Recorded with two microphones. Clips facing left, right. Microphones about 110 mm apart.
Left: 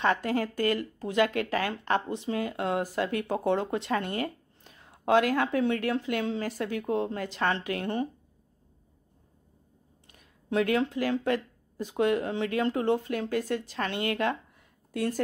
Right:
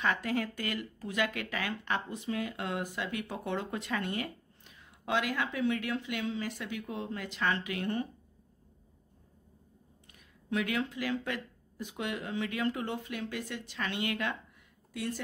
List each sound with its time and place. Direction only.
0.0 s speech: 30° left (ahead or behind)
10.1 s speech: 35° left (ahead or behind)